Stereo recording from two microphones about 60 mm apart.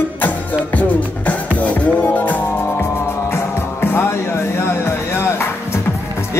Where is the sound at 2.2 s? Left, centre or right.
Left.